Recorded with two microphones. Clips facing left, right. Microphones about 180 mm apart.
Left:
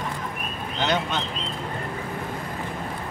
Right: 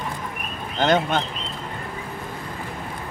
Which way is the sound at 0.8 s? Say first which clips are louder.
Right 6 dB; 50° right (ahead or behind).